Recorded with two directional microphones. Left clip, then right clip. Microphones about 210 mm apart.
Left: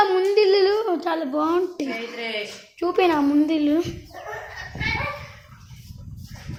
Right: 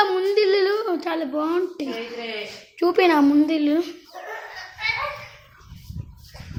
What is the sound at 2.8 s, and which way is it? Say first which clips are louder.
Speech: right 2 dB; 5° right (ahead or behind).